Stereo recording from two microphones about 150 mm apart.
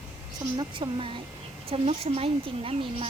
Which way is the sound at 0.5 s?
35° right (ahead or behind).